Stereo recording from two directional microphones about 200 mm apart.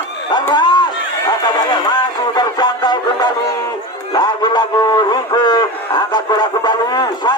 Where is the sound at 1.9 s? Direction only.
20° left (ahead or behind).